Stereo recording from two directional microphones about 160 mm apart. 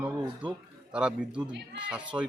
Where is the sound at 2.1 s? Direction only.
20° right (ahead or behind).